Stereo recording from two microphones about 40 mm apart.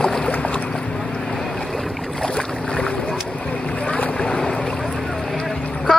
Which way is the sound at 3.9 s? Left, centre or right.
Left.